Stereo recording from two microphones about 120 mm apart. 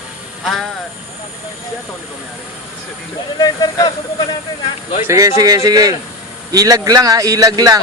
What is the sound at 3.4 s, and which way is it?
Speech, 35° left (ahead or behind).